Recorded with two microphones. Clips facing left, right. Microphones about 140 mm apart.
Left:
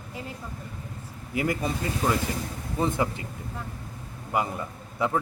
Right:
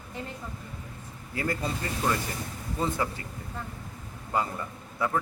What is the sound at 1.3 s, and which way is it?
Speech, 15° left (ahead or behind).